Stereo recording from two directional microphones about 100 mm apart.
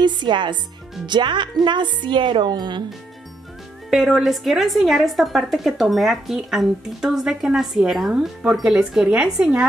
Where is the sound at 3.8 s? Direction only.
5° right (ahead or behind).